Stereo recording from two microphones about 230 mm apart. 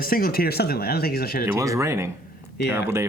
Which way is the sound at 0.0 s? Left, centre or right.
Left.